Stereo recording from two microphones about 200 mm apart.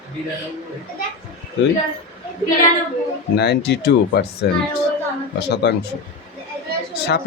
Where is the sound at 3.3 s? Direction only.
55° left (ahead or behind).